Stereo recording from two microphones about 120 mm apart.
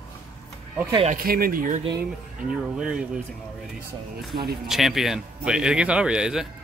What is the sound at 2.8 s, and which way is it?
Speech, 5° right (ahead or behind).